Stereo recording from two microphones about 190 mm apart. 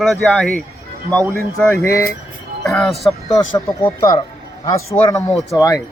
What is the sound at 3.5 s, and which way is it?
Speech, 15° left (ahead or behind).